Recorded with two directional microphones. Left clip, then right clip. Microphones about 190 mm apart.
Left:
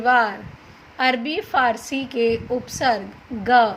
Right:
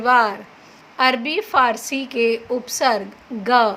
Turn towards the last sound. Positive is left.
turn(degrees=-20)  # may be behind; listen again after turning